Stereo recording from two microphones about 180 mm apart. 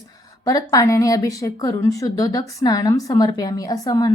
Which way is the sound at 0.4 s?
20° left (ahead or behind).